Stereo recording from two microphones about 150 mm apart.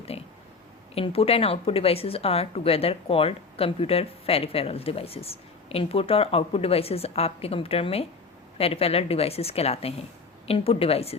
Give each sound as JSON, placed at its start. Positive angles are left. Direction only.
{"t": 0.1, "sound": "a woman's voice", "side_deg": 40}